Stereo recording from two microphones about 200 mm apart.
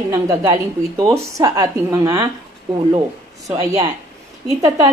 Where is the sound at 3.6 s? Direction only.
15° right (ahead or behind).